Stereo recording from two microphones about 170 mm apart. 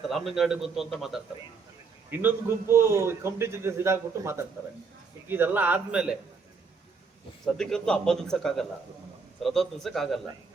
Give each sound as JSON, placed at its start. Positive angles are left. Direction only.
{"t": 0.0, "sound": "a man's voice", "side_deg": 0}
{"t": 2.0, "sound": "a man's voice", "side_deg": -10}
{"t": 7.4, "sound": "a man's voice", "side_deg": 5}